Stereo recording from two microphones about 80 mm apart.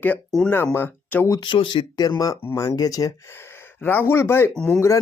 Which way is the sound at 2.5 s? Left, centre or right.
Left.